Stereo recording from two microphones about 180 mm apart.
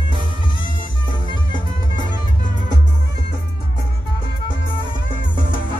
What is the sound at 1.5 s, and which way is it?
Music, 25° left (ahead or behind).